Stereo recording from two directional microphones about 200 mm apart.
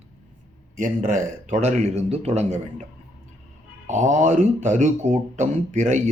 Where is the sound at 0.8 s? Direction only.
40° right (ahead or behind).